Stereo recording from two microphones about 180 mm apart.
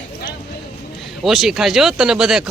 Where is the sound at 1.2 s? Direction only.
Centre (ahead or behind).